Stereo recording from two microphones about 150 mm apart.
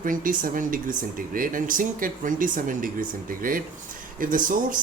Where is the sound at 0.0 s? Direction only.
65° right (ahead or behind).